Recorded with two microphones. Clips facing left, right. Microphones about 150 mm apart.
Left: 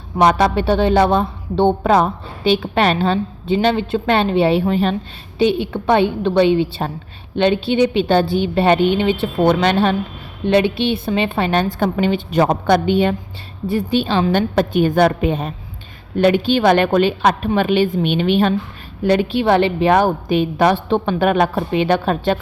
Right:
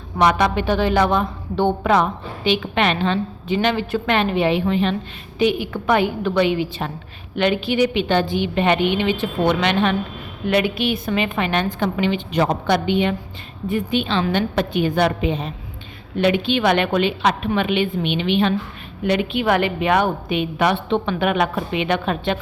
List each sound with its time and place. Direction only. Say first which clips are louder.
0.3 s a woman's voice: left 3 dB; 35° left (ahead or behind)
5.4 s a woman's voice: left 3 dB; 25° left (ahead or behind)